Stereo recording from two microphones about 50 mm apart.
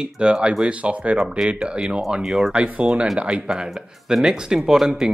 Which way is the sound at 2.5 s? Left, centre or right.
Right.